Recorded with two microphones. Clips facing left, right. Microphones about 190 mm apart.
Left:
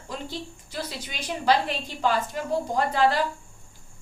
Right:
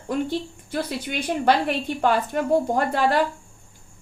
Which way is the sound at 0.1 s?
55° right (ahead or behind).